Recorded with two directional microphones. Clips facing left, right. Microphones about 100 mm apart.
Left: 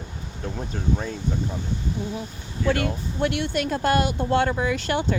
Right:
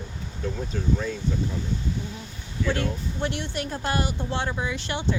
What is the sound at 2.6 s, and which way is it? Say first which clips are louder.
Speech: left 3 dB; 65° left (ahead or behind).